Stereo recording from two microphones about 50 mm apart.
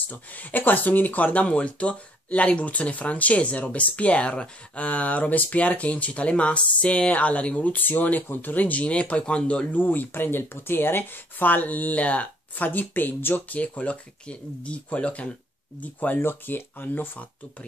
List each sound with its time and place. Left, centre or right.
0.1 s speech: left
1.4 s speech: left
9.7 s speech: left
15.8 s speech: left
16.2 s speech: left